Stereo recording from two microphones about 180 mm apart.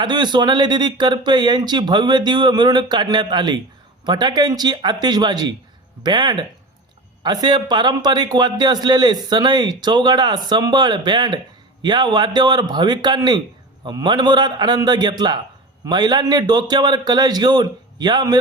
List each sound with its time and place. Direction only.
0.0 s a man's voice: 25° right (ahead or behind)